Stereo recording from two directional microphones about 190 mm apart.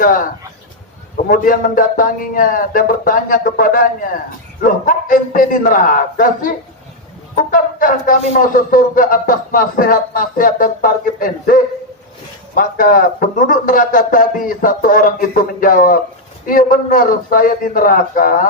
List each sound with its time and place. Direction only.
0.0 s speech: 45° left (ahead or behind)
7.5 s speech: 45° left (ahead or behind)